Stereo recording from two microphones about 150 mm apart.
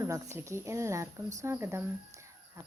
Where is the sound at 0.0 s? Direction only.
20° right (ahead or behind).